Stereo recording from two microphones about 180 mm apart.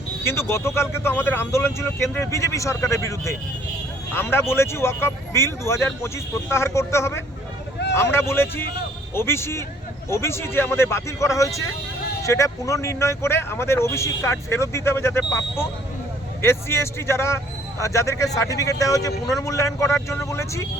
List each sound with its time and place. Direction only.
0.3 s speech: 15° left (ahead or behind)